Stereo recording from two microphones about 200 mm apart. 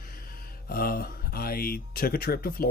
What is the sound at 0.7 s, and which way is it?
Speech, 50° left (ahead or behind).